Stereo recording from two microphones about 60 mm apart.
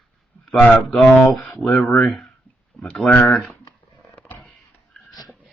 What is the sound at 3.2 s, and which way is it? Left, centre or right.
Speech, centre.